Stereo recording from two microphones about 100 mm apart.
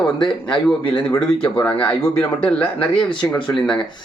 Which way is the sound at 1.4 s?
15° left (ahead or behind).